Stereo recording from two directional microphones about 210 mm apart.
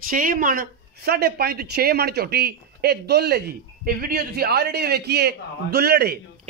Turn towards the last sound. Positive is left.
turn(degrees=-50)  # may be behind; listen again after turning